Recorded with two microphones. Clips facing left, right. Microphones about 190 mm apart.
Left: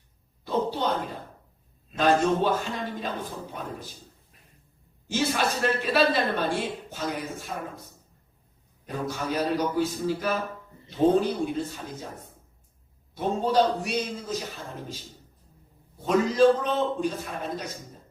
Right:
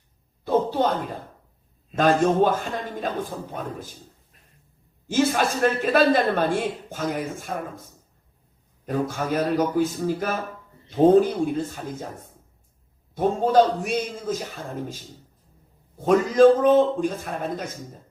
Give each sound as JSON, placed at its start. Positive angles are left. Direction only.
{"t": 0.4, "sound": "a sound", "side_deg": -50}
{"t": 2.0, "sound": "a man's voice", "side_deg": -50}
{"t": 5.0, "sound": "a man's voice", "side_deg": -50}
{"t": 8.9, "sound": "a man's voice", "side_deg": -50}
{"t": 13.1, "sound": "a man's voice", "side_deg": -50}
{"t": 16.0, "sound": "a man's voice", "side_deg": -50}